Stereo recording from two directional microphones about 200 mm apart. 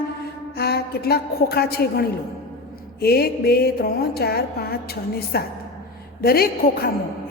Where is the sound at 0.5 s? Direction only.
50° left (ahead or behind).